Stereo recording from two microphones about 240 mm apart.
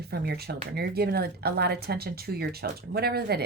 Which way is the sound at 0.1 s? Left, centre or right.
Right.